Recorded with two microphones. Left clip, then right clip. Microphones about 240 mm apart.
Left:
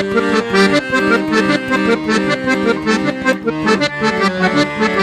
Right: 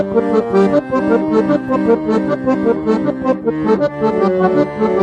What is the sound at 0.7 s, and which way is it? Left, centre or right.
Accordion, left.